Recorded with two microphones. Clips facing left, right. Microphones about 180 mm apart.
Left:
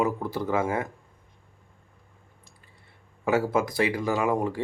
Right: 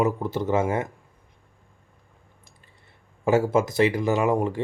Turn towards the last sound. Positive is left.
turn(degrees=-20)  # may be behind; listen again after turning